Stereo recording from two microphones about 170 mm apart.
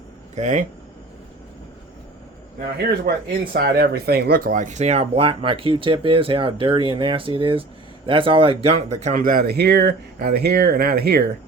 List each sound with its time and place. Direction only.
0.3 s speech: 45° right (ahead or behind)
3.1 s speech: 60° right (ahead or behind)